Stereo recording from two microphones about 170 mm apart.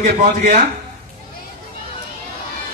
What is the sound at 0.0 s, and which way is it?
Speech, 45° right (ahead or behind).